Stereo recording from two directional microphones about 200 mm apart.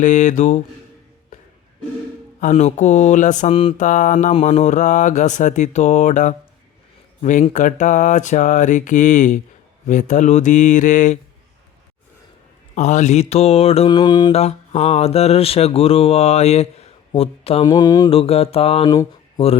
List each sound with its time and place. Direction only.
0.0 s mantra: 40° left (ahead or behind)
2.4 s mantra: 30° left (ahead or behind)
12.7 s mantra: 35° left (ahead or behind)